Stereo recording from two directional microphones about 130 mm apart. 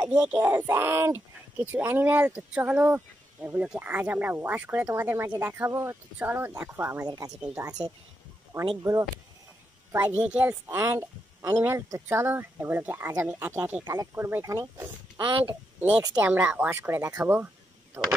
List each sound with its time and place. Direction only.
0.0 s speech: 10° right (ahead or behind)
7.1 s speech: 25° right (ahead or behind)
9.9 s speech: 15° right (ahead or behind)